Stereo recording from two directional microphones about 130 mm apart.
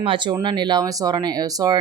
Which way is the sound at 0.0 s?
40° right (ahead or behind).